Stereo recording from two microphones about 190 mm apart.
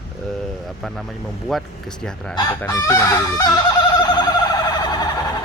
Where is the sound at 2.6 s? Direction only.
15° left (ahead or behind).